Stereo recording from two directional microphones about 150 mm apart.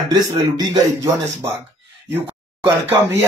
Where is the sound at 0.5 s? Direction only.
25° right (ahead or behind).